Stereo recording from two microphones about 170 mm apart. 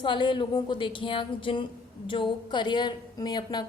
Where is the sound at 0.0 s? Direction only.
30° left (ahead or behind).